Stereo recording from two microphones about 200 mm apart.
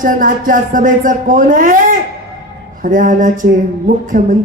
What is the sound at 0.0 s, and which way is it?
Speech, 45° right (ahead or behind).